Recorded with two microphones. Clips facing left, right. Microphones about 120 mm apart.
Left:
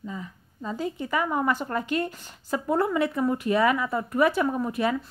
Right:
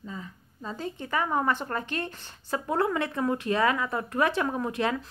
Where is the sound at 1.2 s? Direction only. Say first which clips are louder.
Even; 10° left (ahead or behind).